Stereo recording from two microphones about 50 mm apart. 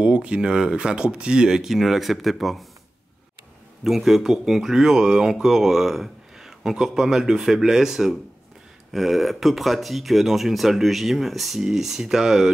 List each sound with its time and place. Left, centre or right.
0.0 s speech: right; by 2.6 s centre
3.8 s speech: centre